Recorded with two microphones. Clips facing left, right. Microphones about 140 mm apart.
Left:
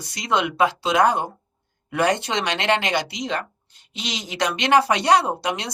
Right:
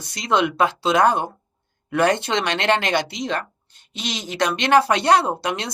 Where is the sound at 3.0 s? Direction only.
55° right (ahead or behind).